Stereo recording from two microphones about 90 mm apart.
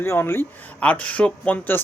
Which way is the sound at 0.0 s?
25° left (ahead or behind).